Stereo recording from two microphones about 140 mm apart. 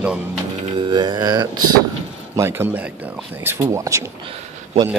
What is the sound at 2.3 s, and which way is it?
A man's voice, 20° right (ahead or behind).